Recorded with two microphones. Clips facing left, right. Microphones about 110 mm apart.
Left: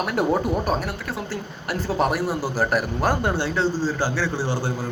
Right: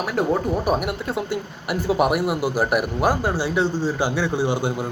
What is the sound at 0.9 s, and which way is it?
Speech, 25° right (ahead or behind).